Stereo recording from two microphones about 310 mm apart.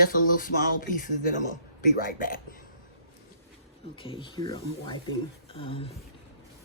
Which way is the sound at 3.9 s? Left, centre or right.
Centre.